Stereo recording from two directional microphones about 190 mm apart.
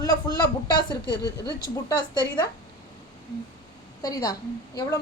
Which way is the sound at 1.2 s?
20° right (ahead or behind).